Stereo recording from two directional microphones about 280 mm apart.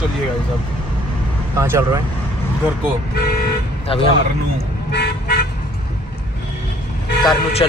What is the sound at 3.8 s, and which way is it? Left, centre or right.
Speech, centre.